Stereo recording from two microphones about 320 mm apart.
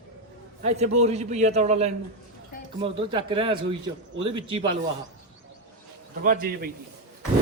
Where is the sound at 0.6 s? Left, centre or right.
Right.